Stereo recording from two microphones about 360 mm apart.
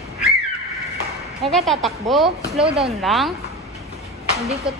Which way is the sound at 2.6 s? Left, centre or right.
Centre.